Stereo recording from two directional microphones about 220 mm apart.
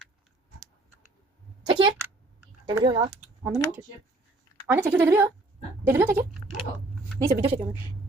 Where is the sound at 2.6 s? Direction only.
20° right (ahead or behind).